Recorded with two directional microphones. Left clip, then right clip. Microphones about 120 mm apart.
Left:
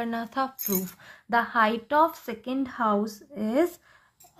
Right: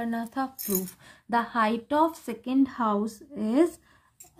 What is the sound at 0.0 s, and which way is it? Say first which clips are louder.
Speech: left 2 dB; 15° right (ahead or behind).